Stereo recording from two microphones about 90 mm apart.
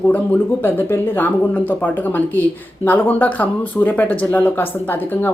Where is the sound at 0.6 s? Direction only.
20° left (ahead or behind).